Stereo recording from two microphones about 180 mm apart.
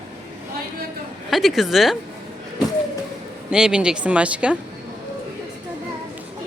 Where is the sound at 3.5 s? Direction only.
5° right (ahead or behind).